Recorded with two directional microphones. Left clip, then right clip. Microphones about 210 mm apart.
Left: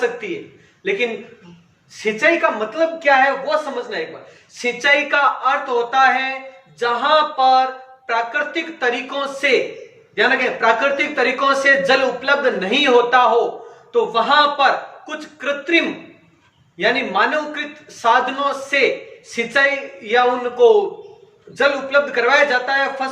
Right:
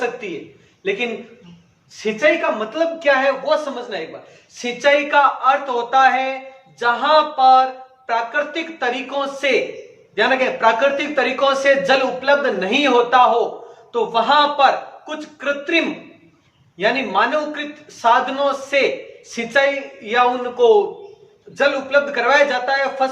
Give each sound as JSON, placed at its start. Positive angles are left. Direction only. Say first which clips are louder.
{"t": 2.0, "sound": "a man's voice", "louder": "left 1 dB", "side_deg": -15}